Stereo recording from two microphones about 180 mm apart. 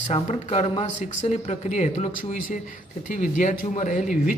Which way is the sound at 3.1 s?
45° left (ahead or behind).